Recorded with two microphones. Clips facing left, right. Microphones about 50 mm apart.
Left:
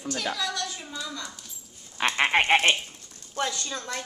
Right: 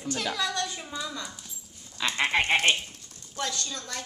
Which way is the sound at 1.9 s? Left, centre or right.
Left.